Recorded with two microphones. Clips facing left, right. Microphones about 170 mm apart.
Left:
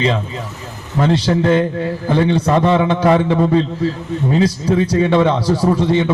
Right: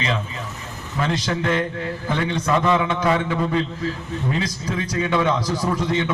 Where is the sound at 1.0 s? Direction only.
30° left (ahead or behind).